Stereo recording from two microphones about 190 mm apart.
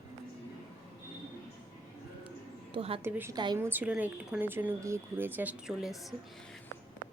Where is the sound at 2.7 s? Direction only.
30° right (ahead or behind).